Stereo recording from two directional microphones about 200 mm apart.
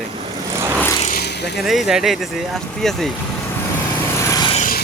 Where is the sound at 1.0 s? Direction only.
50° left (ahead or behind).